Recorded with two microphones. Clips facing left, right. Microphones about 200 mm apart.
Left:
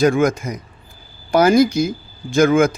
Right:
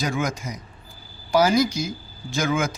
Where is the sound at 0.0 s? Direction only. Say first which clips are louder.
Left 11 dB; 55° left (ahead or behind).